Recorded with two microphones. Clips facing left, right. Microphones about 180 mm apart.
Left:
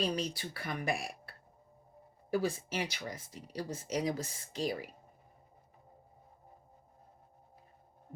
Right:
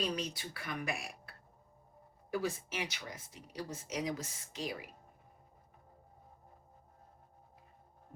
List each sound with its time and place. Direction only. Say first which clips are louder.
0.0 s speech: left 3 dB; 30° left (ahead or behind)